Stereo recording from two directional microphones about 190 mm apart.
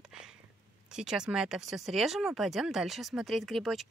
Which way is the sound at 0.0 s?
5° right (ahead or behind).